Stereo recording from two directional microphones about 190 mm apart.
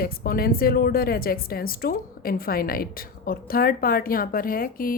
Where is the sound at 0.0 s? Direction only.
55° left (ahead or behind).